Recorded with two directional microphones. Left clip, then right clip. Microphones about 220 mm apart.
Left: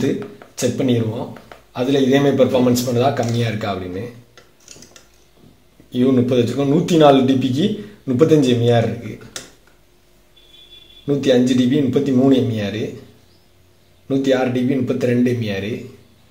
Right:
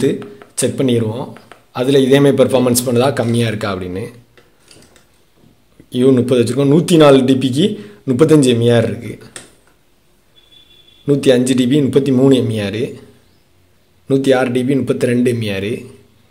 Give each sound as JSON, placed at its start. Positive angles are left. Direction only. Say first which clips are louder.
{"t": 0.6, "sound": "speech", "louder": "right 3 dB", "side_deg": -40}
{"t": 5.9, "sound": "speech", "louder": "right 4 dB", "side_deg": -40}
{"t": 11.1, "sound": "speech", "louder": "right 3 dB", "side_deg": -40}
{"t": 14.0, "sound": "speech", "louder": "right 4 dB", "side_deg": -40}